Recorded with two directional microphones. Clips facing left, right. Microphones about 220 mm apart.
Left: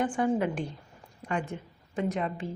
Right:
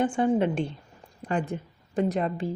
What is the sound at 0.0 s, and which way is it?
A woman's voice, 25° right (ahead or behind).